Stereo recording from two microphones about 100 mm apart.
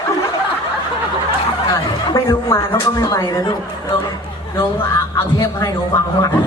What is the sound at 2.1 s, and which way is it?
A man's voice, 30° left (ahead or behind).